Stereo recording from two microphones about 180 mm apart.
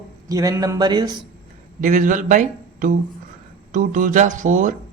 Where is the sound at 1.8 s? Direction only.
45° right (ahead or behind).